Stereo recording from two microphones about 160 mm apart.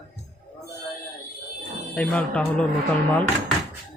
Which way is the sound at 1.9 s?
5° left (ahead or behind).